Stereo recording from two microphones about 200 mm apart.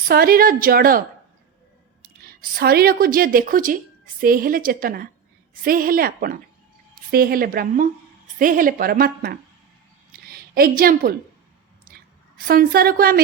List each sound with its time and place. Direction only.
0.1 s a woman's voice: 45° right (ahead or behind)
2.2 s a woman's voice: 50° right (ahead or behind)
10.1 s a sound: 50° right (ahead or behind)
12.5 s a woman's voice: 45° right (ahead or behind)